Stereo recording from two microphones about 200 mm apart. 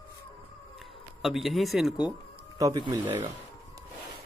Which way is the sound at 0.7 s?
Centre (ahead or behind).